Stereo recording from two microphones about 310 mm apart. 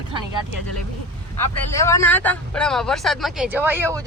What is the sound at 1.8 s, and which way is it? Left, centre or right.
Speech, centre.